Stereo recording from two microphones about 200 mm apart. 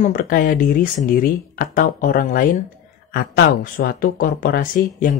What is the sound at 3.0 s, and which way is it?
Speech, 55° left (ahead or behind).